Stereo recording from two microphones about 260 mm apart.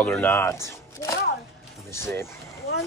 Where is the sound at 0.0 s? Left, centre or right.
Centre.